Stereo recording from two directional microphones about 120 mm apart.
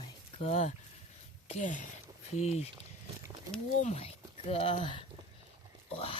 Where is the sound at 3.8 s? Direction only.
60° left (ahead or behind).